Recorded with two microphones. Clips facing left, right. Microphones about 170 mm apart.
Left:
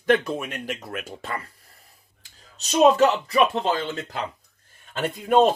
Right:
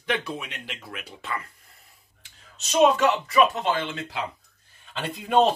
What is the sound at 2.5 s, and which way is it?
Speech, 40° left (ahead or behind).